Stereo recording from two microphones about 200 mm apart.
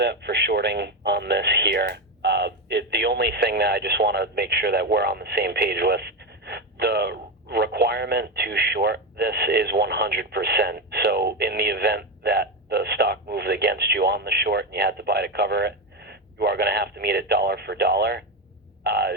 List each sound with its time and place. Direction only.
0.0 s speech: 55° right (ahead or behind)
18.8 s frog: 55° right (ahead or behind)